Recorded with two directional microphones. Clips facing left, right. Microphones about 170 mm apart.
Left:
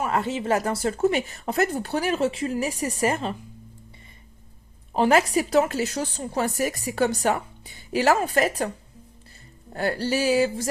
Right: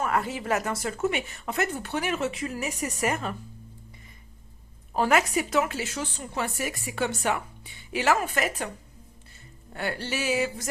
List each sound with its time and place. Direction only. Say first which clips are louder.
0.0 s speech: left 2 dB; 25° left (ahead or behind)
5.0 s speech: left 4 dB; 35° left (ahead or behind)
9.7 s speech: left 6 dB; 35° left (ahead or behind)